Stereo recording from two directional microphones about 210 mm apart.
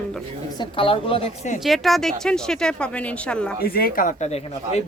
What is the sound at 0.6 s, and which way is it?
Speech, 25° left (ahead or behind).